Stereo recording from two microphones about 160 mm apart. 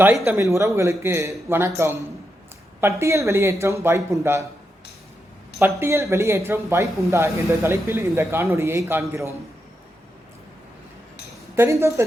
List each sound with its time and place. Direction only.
0.3 s speech: 15° right (ahead or behind)
5.5 s speech: 15° right (ahead or behind)
11.5 s speech: 15° right (ahead or behind)